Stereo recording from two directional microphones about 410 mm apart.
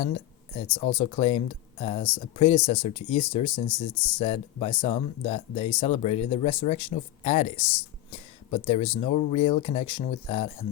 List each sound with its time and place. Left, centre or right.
0.8 s speech: centre
4.2 s speech: centre
8.1 s a sound: centre
9.0 s speech: centre